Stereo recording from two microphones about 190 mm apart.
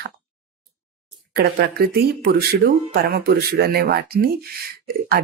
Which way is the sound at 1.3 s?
55° right (ahead or behind).